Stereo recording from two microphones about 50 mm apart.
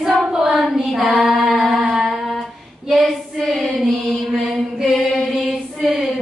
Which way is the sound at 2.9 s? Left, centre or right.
Centre.